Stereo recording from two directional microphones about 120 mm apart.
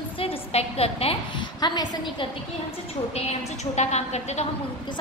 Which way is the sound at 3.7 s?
65° left (ahead or behind).